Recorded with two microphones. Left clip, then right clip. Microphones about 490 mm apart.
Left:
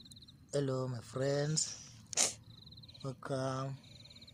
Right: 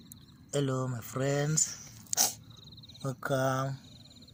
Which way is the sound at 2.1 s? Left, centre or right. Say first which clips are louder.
Right 5 dB; left.